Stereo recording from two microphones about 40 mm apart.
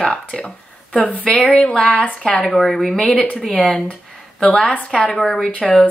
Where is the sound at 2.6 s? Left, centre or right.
Centre.